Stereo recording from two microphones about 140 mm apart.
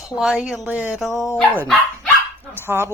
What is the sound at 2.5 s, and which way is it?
Speech, 15° right (ahead or behind).